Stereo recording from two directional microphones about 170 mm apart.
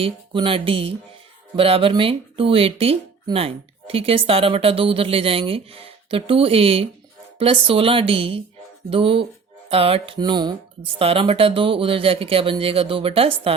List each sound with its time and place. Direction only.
0.0 s speech: 30° right (ahead or behind)